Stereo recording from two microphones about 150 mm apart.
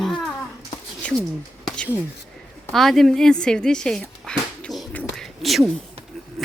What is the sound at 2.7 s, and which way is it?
Speech, centre (ahead or behind).